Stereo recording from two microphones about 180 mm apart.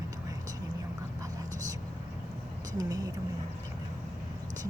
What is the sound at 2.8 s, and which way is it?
Speech, 20° right (ahead or behind).